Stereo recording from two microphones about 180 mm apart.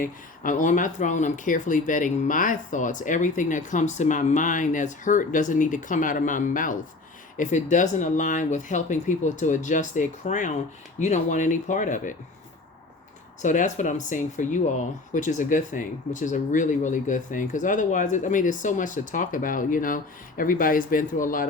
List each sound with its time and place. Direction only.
0.0 s speech: 45° left (ahead or behind)
13.4 s speech: 45° left (ahead or behind)